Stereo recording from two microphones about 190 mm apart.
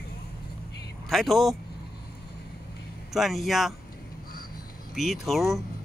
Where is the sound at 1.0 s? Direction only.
Centre (ahead or behind).